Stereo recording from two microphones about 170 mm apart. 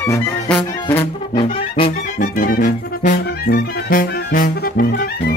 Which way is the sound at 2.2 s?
55° left (ahead or behind).